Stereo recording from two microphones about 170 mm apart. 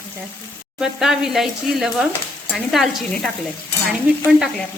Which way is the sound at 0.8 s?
5° right (ahead or behind).